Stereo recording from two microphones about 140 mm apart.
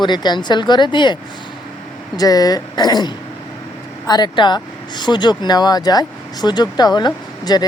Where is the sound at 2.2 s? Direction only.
25° left (ahead or behind).